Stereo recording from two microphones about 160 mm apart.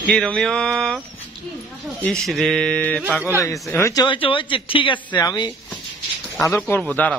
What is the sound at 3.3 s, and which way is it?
Speech, 20° left (ahead or behind).